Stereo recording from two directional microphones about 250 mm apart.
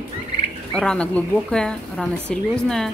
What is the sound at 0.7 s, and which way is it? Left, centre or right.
Speech, centre.